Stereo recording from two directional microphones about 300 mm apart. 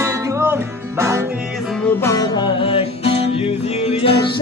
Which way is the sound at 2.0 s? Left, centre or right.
Centre.